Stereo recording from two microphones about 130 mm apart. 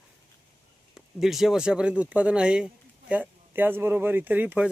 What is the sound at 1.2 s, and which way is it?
Speech, centre (ahead or behind).